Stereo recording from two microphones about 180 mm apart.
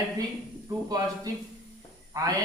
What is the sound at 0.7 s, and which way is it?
Speech, 20° right (ahead or behind).